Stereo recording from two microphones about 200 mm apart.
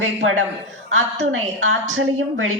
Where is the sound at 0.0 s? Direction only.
80° right.